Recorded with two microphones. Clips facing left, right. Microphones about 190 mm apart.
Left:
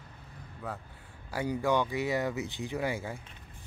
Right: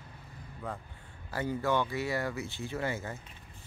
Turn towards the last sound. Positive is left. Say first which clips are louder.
# left 2 dB
turn(degrees=10)  # may be behind; listen again after turning